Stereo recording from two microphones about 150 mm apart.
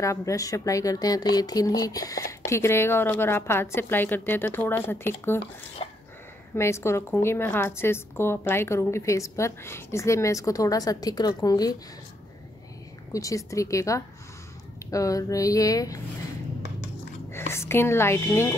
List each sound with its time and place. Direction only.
0.0 s a woman's voice: 20° left (ahead or behind)
6.5 s a woman's voice: 15° left (ahead or behind)
13.1 s speech: 20° left (ahead or behind)
17.3 s speech: 15° left (ahead or behind)